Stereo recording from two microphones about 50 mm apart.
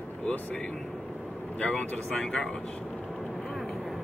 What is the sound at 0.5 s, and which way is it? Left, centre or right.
Speech, centre.